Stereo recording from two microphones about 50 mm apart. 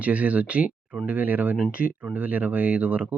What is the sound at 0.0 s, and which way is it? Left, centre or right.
Speech, right.